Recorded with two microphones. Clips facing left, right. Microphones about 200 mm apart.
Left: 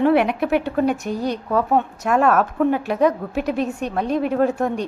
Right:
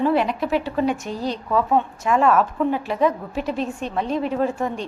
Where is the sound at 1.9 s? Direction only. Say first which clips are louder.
Even; 65° left (ahead or behind).